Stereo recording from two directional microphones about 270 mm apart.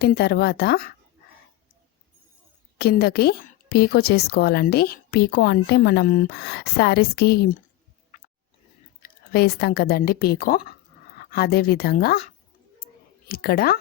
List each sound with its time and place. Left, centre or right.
0.0 s a woman's voice: left
2.7 s a woman's voice: left
9.0 s a woman's voice: left
12.8 s a sound: left